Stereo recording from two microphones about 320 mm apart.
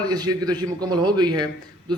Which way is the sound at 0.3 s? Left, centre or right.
Right.